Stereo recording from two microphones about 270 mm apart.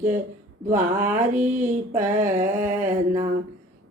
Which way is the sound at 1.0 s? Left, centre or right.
Centre.